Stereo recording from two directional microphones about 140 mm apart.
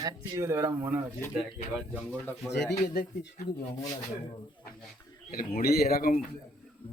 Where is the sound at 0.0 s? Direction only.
20° right (ahead or behind).